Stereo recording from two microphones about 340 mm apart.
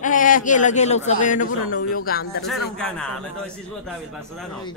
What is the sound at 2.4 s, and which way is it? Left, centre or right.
A man's voice, centre.